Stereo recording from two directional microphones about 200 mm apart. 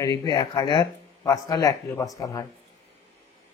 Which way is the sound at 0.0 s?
20° left (ahead or behind).